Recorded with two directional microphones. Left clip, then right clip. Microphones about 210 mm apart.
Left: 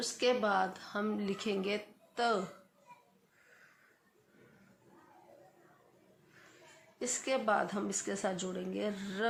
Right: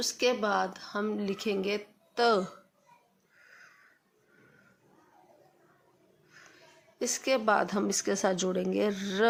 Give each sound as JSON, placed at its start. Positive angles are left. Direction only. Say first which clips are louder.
{"t": 0.0, "sound": "speech", "louder": "right 3 dB", "side_deg": -35}
{"t": 7.0, "sound": "speech", "louder": "right 6 dB", "side_deg": -35}